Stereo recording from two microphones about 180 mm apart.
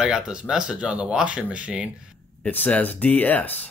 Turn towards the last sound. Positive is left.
turn(degrees=10)  # may be behind; listen again after turning